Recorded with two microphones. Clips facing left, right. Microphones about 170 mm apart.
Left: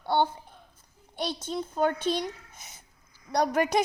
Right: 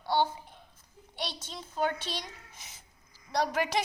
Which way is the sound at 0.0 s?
55° left (ahead or behind).